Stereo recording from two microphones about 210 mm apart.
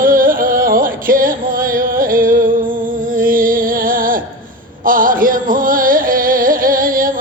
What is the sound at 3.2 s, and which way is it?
Music, 40° right (ahead or behind).